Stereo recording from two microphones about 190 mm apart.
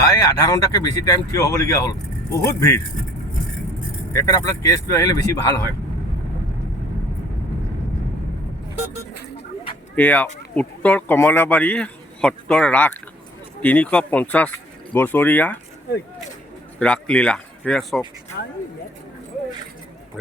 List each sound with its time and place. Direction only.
0.0 s speech: 20° left (ahead or behind)
4.1 s speech: 15° left (ahead or behind)
9.9 s speech: 10° left (ahead or behind)
16.8 s speech: 5° left (ahead or behind)
18.4 s speech: 55° left (ahead or behind)